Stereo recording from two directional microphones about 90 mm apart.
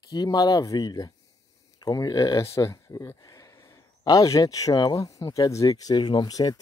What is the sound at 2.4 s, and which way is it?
Speech, 30° left (ahead or behind).